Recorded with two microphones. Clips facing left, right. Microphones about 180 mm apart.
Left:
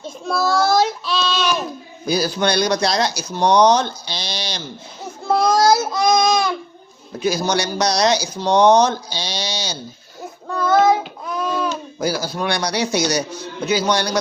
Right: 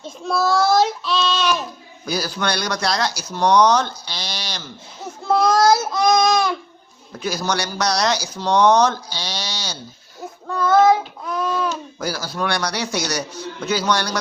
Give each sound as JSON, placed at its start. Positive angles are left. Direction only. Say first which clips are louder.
{"t": 0.0, "sound": "child singing", "louder": "even", "side_deg": 0}
{"t": 2.0, "sound": "speech", "louder": "left 4 dB", "side_deg": 20}
{"t": 5.3, "sound": "child singing", "louder": "even", "side_deg": 0}
{"t": 7.2, "sound": "speech", "louder": "left 4 dB", "side_deg": 20}
{"t": 10.5, "sound": "child singing", "louder": "right 1 dB", "side_deg": 0}
{"t": 11.9, "sound": "speech", "louder": "left 3 dB", "side_deg": 15}